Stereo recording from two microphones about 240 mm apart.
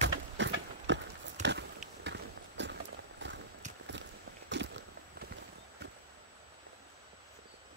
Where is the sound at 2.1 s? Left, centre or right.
Right.